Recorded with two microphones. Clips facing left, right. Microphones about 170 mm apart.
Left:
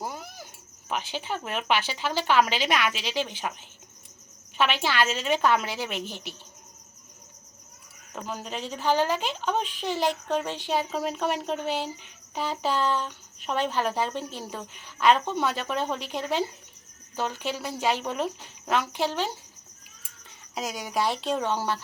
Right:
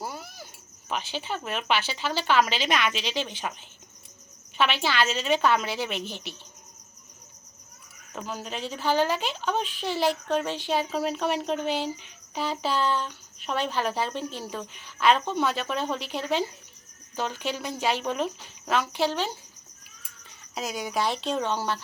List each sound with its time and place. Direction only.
0.0 s cricket: 15° left (ahead or behind)
0.9 s speech: 15° left (ahead or behind)
4.5 s speech: 10° left (ahead or behind)
8.4 s speech: 10° right (ahead or behind)
8.8 s speech: 15° left (ahead or behind)
20.6 s speech: 10° left (ahead or behind)